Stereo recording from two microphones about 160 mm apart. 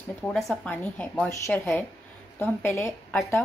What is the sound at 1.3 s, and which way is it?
A woman's voice, 20° left (ahead or behind).